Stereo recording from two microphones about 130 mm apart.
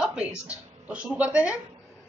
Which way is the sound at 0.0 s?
10° right (ahead or behind).